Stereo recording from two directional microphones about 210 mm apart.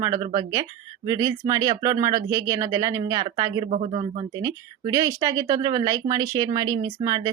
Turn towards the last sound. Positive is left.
turn(degrees=-20)  # may be behind; listen again after turning